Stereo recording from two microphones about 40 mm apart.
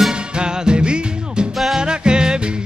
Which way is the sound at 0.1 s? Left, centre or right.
Right.